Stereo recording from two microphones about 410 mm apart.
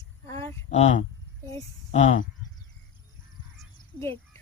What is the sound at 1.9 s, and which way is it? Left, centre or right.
Speech, centre.